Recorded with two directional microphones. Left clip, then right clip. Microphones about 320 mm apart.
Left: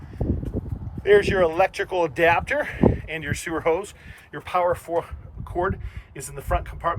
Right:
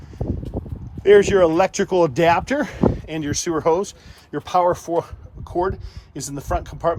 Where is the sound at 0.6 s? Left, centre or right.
Centre.